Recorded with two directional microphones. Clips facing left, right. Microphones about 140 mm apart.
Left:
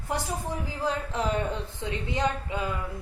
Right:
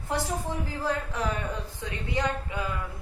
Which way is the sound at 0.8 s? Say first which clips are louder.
Left 2 dB; 20° left (ahead or behind).